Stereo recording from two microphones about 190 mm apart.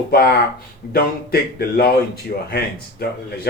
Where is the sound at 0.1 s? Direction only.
55° left (ahead or behind).